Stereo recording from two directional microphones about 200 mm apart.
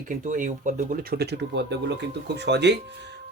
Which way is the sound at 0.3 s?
40° right (ahead or behind).